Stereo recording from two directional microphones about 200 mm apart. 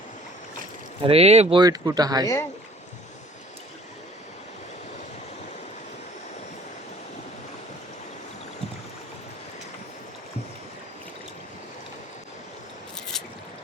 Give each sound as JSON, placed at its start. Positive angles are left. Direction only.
{"t": 1.0, "sound": "speech", "side_deg": -30}
{"t": 2.2, "sound": "speech", "side_deg": 15}